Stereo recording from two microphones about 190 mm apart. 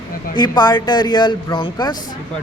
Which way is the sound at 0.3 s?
20° left (ahead or behind).